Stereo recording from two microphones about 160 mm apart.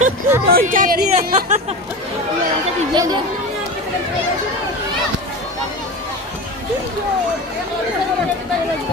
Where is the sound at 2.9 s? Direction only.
25° right (ahead or behind).